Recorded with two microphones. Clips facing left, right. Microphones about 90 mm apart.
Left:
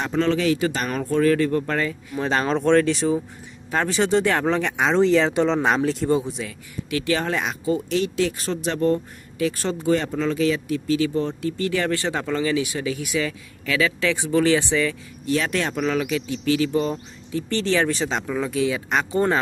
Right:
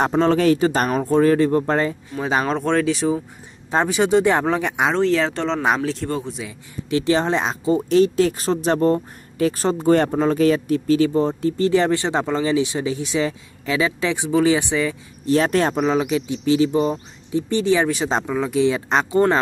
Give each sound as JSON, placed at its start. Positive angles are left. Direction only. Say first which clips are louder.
{"t": 0.0, "sound": "speech", "louder": "right 4 dB", "side_deg": -40}
{"t": 2.1, "sound": "speech", "louder": "even", "side_deg": -5}
{"t": 4.9, "sound": "speech", "louder": "left 5 dB", "side_deg": 0}
{"t": 6.0, "sound": "speech", "louder": "left 4 dB", "side_deg": 15}
{"t": 6.9, "sound": "speech", "louder": "right 5 dB", "side_deg": -25}
{"t": 15.2, "sound": "speech", "louder": "right 6 dB", "side_deg": -35}
{"t": 15.8, "sound": "speech", "louder": "right 4 dB", "side_deg": -25}
{"t": 18.7, "sound": "speech", "louder": "right 4 dB", "side_deg": -25}